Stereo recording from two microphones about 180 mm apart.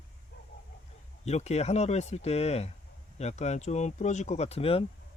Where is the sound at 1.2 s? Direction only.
35° left (ahead or behind).